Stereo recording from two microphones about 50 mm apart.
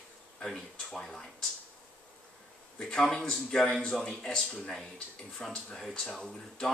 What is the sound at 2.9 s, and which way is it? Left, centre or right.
Speech, centre.